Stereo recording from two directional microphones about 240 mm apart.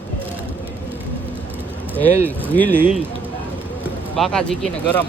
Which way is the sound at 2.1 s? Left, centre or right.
Centre.